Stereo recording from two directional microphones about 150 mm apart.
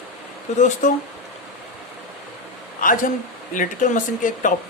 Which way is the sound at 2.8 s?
65° left (ahead or behind).